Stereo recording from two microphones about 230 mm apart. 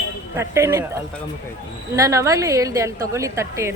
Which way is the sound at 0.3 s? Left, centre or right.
Centre.